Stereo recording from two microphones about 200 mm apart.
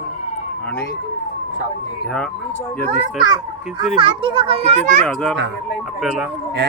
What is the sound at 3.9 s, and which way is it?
A child's voice, 25° right (ahead or behind).